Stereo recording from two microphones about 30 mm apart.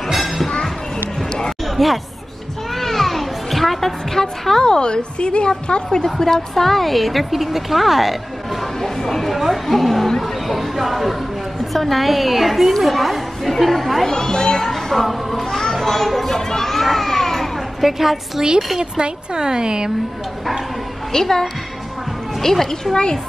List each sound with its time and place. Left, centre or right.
0.1 s a sound: centre
1.8 s a woman's voice: centre
2.7 s children playing: centre
4.7 s a woman's voice: left
6.0 s a woman's voice: centre
8.8 s a sound: centre
11.7 s a woman's voice: centre
14.0 s a woman's voice: left
14.6 s a sound: centre
15.0 s a woman's voice: centre
15.7 s children playing: centre
17.8 s a woman's voice: centre
18.8 s speech: right
21.1 s a child's voice: centre